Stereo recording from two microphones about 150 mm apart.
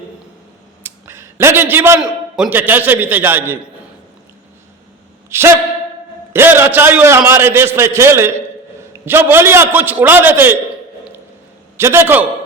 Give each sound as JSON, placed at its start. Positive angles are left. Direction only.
{"t": 0.8, "sound": "a sound", "side_deg": -15}
{"t": 2.0, "sound": "a man's voice", "side_deg": -5}
{"t": 5.3, "sound": "a man's voice", "side_deg": -15}
{"t": 11.8, "sound": "a man's voice", "side_deg": -15}